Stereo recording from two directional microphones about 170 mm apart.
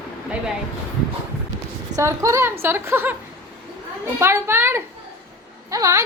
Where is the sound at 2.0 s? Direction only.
15° right (ahead or behind).